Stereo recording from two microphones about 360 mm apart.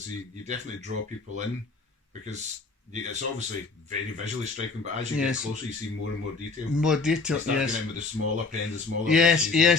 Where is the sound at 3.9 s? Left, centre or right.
Centre.